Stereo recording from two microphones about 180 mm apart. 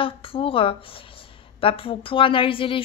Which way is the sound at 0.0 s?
30° left (ahead or behind).